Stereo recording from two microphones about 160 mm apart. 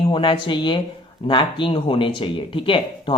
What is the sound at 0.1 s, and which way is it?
Speech, 30° left (ahead or behind).